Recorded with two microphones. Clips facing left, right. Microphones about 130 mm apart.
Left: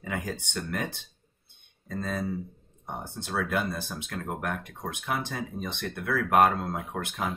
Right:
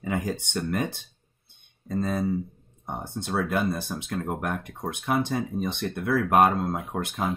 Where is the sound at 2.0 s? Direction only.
10° right (ahead or behind).